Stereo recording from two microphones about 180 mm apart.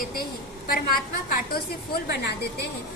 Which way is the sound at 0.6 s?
55° left (ahead or behind).